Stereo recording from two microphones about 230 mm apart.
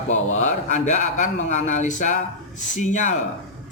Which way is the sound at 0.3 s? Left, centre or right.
Left.